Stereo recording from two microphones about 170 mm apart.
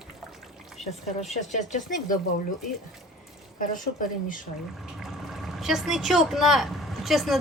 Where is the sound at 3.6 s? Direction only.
50° left (ahead or behind).